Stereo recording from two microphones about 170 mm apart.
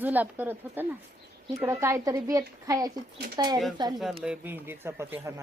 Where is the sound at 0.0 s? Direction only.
10° right (ahead or behind).